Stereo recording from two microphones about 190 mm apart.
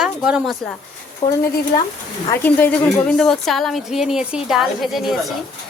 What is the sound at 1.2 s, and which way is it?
Speech, 40° left (ahead or behind).